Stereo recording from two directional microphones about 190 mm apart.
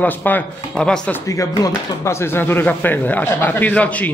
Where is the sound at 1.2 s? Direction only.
15° left (ahead or behind).